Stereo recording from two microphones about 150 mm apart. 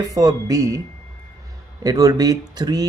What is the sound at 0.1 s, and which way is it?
Speech, 20° right (ahead or behind).